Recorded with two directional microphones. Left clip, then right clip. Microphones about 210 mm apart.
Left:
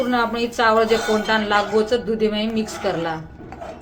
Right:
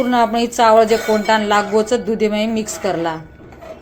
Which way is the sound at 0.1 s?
20° right (ahead or behind).